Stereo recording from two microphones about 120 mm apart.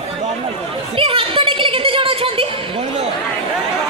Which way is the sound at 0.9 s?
50° right (ahead or behind).